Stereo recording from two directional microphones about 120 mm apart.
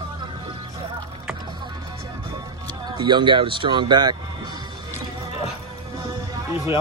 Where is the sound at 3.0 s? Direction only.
40° right (ahead or behind).